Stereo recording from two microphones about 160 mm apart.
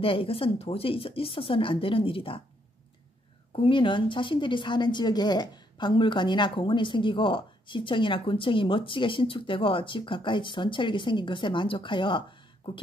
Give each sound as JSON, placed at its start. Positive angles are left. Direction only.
{"t": 0.0, "sound": "a woman's voice", "side_deg": 35}
{"t": 3.5, "sound": "a woman's voice", "side_deg": 30}